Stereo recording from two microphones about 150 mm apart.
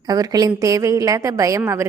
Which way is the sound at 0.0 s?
25° right (ahead or behind).